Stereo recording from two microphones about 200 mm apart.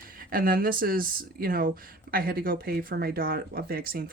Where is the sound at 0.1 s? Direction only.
45° right (ahead or behind).